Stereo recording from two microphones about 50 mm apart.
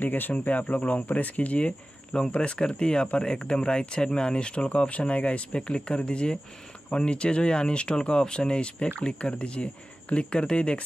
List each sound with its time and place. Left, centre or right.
0.0 s speech: left; by 10.8 s centre